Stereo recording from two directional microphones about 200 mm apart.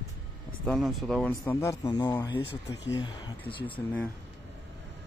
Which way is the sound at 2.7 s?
60° left (ahead or behind).